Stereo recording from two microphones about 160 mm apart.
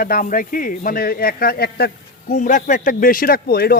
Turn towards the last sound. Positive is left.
turn(degrees=75)  # may be behind; listen again after turning